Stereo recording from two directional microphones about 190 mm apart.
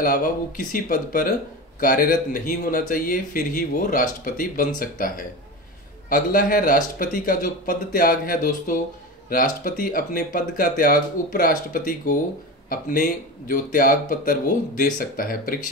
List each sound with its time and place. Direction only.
0.0 s speech: 50° left (ahead or behind)